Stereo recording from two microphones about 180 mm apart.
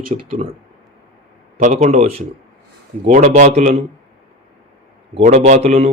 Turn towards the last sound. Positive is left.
turn(degrees=-35)  # may be behind; listen again after turning